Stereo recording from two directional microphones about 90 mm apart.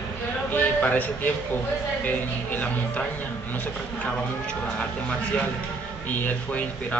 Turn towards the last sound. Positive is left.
turn(degrees=20)  # may be behind; listen again after turning